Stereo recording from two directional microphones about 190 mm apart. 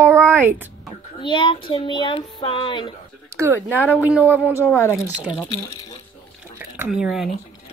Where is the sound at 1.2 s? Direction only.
25° left (ahead or behind).